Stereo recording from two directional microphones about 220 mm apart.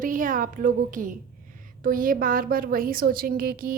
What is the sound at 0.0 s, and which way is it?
A woman's voice, 35° right (ahead or behind).